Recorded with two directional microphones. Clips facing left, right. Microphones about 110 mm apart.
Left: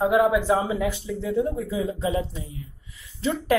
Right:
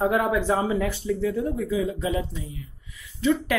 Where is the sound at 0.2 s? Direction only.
10° left (ahead or behind).